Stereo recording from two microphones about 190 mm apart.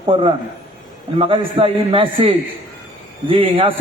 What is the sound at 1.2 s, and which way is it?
A man's voice, 30° right (ahead or behind).